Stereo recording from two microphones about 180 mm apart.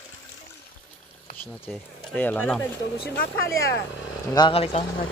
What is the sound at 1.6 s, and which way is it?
Speech, 10° left (ahead or behind).